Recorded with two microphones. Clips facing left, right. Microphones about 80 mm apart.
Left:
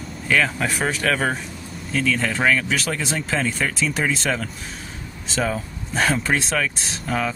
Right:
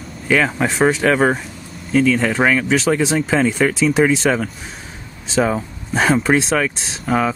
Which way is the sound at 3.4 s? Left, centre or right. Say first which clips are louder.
Right 8 dB; centre.